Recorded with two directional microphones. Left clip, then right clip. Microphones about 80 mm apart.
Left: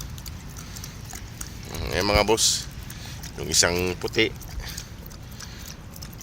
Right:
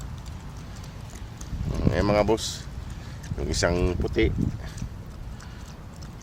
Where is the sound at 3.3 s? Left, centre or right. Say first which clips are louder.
Left 3 dB; right.